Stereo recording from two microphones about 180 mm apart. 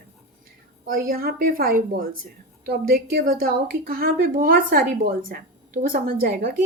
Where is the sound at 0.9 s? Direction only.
55° right (ahead or behind).